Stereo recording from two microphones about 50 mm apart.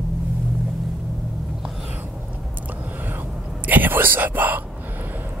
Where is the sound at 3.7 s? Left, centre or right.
Right.